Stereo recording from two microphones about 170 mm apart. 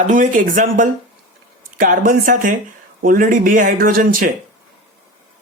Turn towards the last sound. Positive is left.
turn(degrees=-55)  # may be behind; listen again after turning